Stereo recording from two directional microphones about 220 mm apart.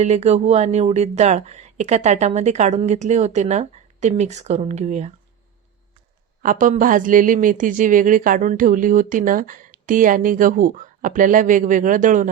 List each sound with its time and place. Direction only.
0.0 s speech: 30° right (ahead or behind)
6.4 s speech: 35° right (ahead or behind)